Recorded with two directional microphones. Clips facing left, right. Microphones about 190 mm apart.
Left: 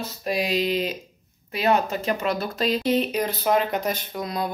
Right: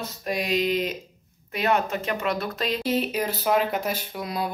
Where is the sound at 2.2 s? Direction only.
Centre (ahead or behind).